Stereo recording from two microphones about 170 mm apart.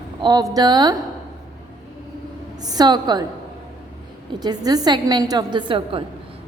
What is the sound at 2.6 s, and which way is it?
Speech, 20° right (ahead or behind).